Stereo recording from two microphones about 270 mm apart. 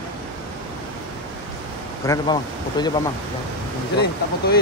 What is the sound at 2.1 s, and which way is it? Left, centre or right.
Speech, centre.